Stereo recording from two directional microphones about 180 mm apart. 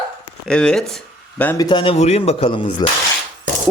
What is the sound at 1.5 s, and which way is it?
Speech, 25° left (ahead or behind).